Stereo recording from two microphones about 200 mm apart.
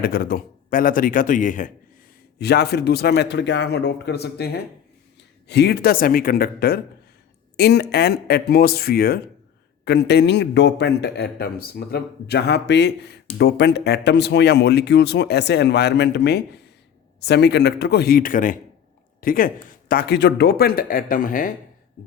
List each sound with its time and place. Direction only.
0.0 s speech: 50° left (ahead or behind)
2.4 s a man's voice: 55° left (ahead or behind)